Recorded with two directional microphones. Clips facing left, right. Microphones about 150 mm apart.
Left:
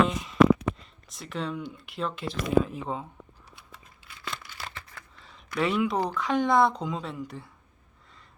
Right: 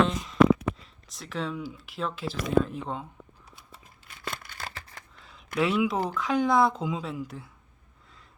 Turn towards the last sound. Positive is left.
turn(degrees=0)  # may be behind; listen again after turning